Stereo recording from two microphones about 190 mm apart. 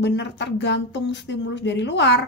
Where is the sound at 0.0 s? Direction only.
65° left (ahead or behind).